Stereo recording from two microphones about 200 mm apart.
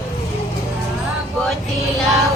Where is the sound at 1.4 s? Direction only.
Centre (ahead or behind).